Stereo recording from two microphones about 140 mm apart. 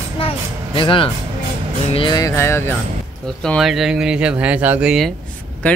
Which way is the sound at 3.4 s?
Centre (ahead or behind).